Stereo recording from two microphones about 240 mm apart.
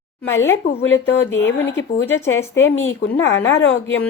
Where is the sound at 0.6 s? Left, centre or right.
Left.